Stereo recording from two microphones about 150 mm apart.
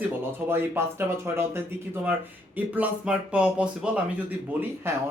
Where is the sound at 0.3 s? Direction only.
15° right (ahead or behind).